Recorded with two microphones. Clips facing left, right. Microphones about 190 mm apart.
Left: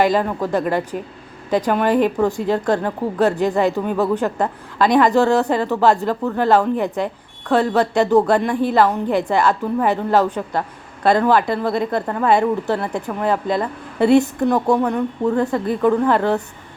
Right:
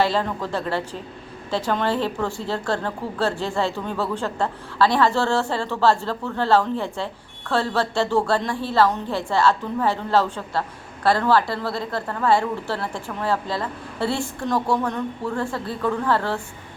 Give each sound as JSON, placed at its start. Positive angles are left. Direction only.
{"t": 0.0, "sound": "a woman's voice", "side_deg": 15}